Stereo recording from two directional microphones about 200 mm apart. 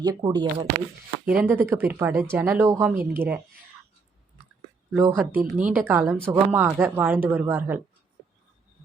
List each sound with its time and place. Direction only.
0.0 s speech: 20° right (ahead or behind)
1.2 s speech: 5° right (ahead or behind)
4.9 s speech: 10° right (ahead or behind)